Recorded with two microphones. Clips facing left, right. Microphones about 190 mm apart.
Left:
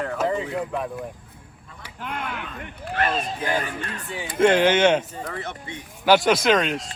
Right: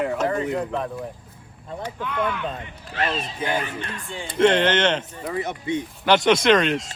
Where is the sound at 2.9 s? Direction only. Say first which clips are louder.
Left 2 dB; 50° left (ahead or behind).